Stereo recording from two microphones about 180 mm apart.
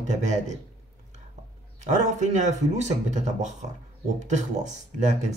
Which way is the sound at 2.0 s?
40° right (ahead or behind).